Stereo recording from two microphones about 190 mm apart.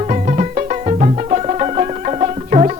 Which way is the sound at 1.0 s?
35° right (ahead or behind).